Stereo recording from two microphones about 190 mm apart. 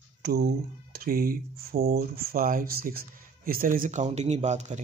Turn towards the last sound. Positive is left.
turn(degrees=-35)  # may be behind; listen again after turning